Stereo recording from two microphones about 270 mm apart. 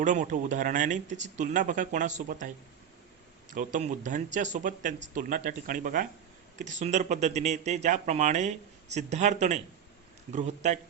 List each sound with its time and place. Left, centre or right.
0.0 s speech: right
3.5 s speech: right